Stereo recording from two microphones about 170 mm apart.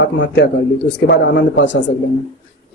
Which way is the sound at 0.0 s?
90° left.